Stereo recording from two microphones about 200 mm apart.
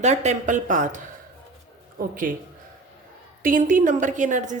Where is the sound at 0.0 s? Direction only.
35° right (ahead or behind).